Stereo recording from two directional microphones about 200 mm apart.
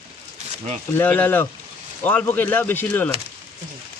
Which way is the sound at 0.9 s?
10° left (ahead or behind).